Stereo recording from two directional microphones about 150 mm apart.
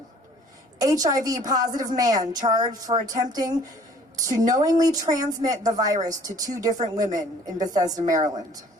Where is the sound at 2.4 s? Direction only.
55° right (ahead or behind).